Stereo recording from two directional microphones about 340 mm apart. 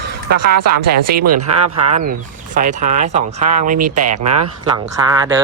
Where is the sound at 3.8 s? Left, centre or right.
Right.